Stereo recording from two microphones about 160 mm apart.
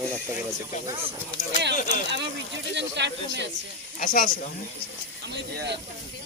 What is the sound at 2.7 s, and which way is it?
Snake, 90° right.